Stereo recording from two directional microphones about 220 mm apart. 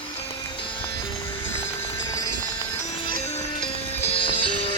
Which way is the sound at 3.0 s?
25° left (ahead or behind).